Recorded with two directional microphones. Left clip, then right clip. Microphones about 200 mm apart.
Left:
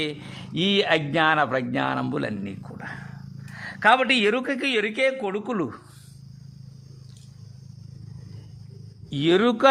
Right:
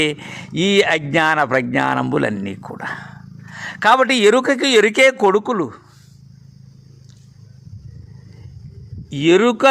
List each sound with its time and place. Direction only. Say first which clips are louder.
0.0 s speech: right 10 dB; 25° right (ahead or behind)
3.8 s speech: right 6 dB; 25° right (ahead or behind)
5.5 s speech: right 6 dB; 5° right (ahead or behind)
9.0 s speech: right 7 dB; 10° right (ahead or behind)